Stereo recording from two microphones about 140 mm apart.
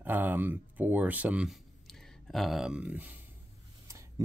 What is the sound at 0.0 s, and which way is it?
Speech, 10° right (ahead or behind).